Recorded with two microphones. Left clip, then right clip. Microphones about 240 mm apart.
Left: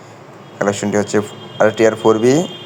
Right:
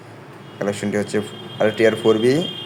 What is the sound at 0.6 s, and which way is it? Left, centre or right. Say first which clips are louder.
A man's voice: left 6 dB; centre.